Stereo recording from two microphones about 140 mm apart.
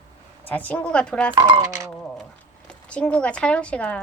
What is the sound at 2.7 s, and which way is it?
A woman's voice, 5° left (ahead or behind).